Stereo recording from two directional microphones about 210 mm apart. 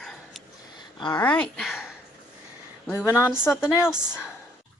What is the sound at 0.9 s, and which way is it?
Speech, 20° left (ahead or behind).